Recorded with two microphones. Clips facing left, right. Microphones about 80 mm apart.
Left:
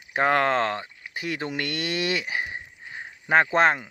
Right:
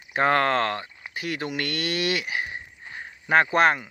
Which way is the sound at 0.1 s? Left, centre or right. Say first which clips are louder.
Even; centre.